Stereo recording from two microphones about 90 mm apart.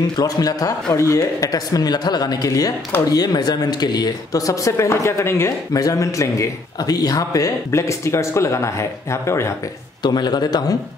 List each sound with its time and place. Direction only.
0.2 s a woman's voice: 45° left (ahead or behind)
5.7 s a man's voice: 40° left (ahead or behind)
10.0 s a woman's voice: 50° left (ahead or behind)